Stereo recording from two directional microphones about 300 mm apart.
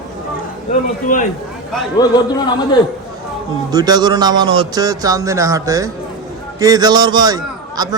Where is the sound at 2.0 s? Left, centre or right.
Centre.